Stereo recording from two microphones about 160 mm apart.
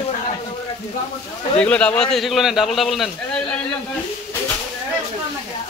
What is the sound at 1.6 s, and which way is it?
Speech, 5° left (ahead or behind).